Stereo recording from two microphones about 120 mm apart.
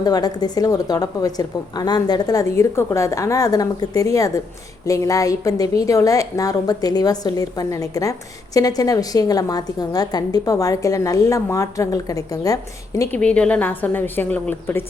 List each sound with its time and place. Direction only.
0.0 s a woman's voice: 35° left (ahead or behind)
13.1 s a woman's voice: 10° left (ahead or behind)